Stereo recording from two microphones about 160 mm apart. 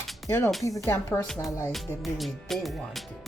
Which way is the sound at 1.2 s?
5° left (ahead or behind).